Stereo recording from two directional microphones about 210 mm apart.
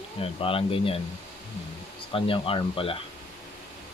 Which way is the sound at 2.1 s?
25° left (ahead or behind).